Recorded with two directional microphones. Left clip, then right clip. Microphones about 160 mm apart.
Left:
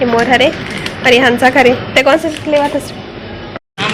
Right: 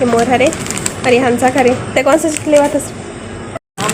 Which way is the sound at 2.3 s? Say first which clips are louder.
Right 2 dB; 25° right (ahead or behind).